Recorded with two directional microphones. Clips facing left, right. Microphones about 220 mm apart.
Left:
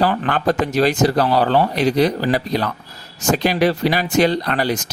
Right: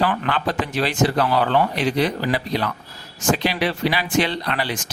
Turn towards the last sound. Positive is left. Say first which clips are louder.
# left 5 dB
turn(degrees=45)  # may be behind; listen again after turning